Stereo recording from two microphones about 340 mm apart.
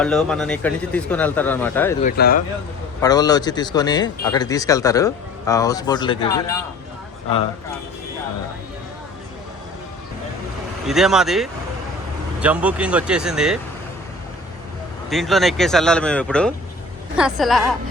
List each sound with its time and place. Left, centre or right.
0.0 s a man's voice: centre
2.0 s speech: left
3.0 s speech: centre
10.8 s a man's voice: centre
15.1 s a man's voice: centre